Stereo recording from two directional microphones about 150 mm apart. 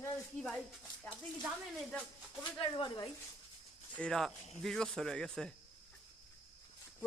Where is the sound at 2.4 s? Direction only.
35° left (ahead or behind).